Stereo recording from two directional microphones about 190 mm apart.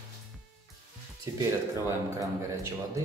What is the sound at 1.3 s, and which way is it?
Speech, 20° right (ahead or behind).